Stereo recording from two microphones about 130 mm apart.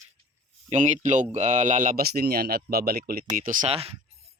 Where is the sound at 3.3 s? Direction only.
90° right.